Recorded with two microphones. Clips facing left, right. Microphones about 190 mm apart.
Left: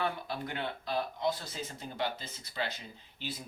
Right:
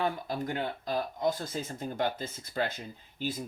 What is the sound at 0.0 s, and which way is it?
Speech, 40° right (ahead or behind).